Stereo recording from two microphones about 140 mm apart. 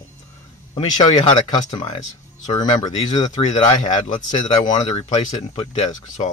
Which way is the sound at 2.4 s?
30° left (ahead or behind).